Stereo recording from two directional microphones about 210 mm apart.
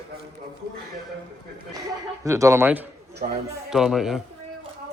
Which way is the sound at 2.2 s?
15° right (ahead or behind).